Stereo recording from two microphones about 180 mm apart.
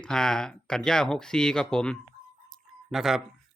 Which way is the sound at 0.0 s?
5° left (ahead or behind).